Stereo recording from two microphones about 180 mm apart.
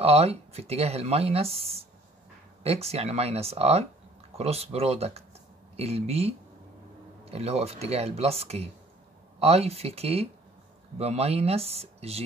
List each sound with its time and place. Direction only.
0.0 s speech: 35° right (ahead or behind)